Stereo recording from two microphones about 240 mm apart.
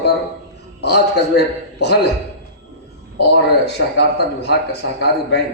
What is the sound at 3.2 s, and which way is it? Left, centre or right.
A man's voice, left.